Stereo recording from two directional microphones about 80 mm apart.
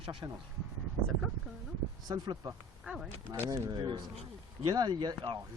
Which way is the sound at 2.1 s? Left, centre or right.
Right.